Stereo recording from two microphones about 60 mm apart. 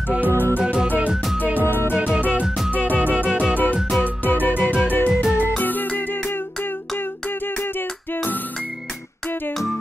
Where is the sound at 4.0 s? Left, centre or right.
Left.